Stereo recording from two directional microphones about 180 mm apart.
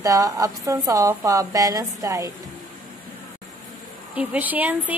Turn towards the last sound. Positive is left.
turn(degrees=-10)  # may be behind; listen again after turning